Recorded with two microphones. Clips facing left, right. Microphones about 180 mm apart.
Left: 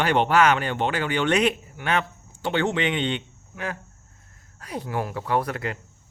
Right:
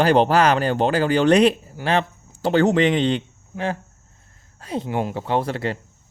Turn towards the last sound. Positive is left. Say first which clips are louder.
# right 3 dB
turn(degrees=-30)  # may be behind; listen again after turning